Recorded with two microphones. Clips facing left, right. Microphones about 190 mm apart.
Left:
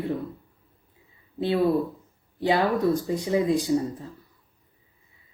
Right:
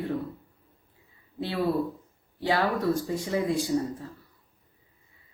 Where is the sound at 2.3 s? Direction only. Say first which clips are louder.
Left 3 dB; 20° left (ahead or behind).